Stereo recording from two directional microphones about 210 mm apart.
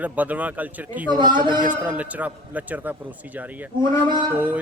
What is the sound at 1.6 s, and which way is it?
A man's voice, 5° right (ahead or behind).